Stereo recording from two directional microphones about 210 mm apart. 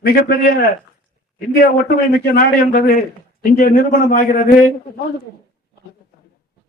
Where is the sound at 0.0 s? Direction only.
45° left (ahead or behind).